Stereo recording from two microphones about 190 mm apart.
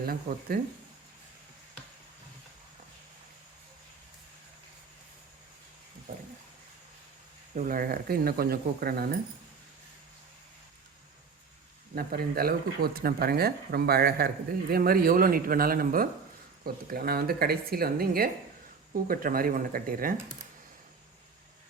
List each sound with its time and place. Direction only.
0.0 s speech: 50° right (ahead or behind)
6.1 s a sound: 45° right (ahead or behind)
7.5 s speech: 45° right (ahead or behind)
11.9 s speech: 50° right (ahead or behind)